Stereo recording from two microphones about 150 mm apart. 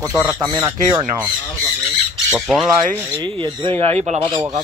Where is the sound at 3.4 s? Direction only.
35° right (ahead or behind).